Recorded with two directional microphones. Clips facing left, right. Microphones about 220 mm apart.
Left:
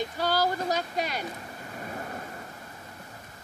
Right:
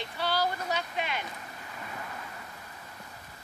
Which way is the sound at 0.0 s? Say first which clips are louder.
Left 4 dB; 45° left (ahead or behind).